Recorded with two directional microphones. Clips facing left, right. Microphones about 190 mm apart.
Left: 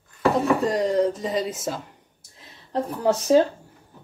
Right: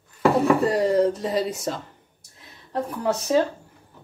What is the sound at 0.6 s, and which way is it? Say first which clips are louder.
Speech: right 1 dB; centre (ahead or behind).